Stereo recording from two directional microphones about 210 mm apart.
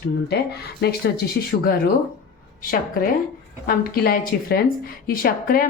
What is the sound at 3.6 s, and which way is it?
Speech, 45° left (ahead or behind).